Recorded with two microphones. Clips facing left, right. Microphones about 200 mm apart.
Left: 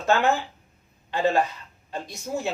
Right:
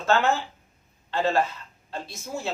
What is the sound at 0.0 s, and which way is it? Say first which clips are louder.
Speech: left 1 dB; 15° left (ahead or behind).